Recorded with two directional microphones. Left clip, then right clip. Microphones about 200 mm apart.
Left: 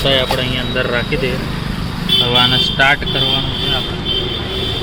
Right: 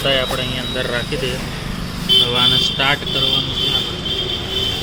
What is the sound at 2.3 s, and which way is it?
Speech, 10° left (ahead or behind).